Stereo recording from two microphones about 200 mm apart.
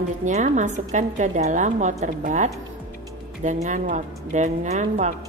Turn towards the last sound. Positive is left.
turn(degrees=-35)  # may be behind; listen again after turning